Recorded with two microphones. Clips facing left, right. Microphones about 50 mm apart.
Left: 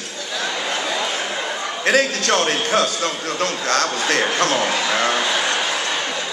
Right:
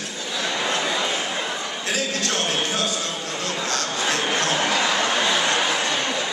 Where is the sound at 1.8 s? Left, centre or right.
Left.